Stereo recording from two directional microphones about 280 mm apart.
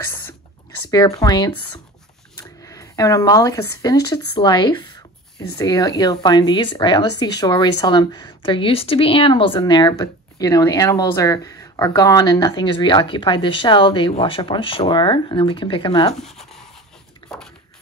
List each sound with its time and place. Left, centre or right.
0.7 s speech: centre
2.6 s speech: centre
16.2 s a sound: centre